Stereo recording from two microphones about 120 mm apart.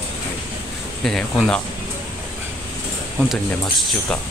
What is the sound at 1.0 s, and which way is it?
Speech, 5° left (ahead or behind).